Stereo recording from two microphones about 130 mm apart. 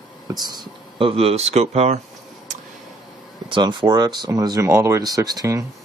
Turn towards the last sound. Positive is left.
turn(degrees=-25)  # may be behind; listen again after turning